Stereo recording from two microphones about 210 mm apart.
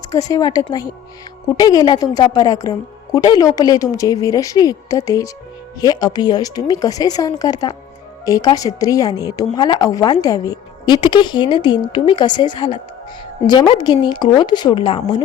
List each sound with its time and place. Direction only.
0.1 s a woman's voice: 15° left (ahead or behind)